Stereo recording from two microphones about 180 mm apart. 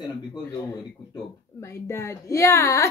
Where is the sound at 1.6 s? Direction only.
15° left (ahead or behind).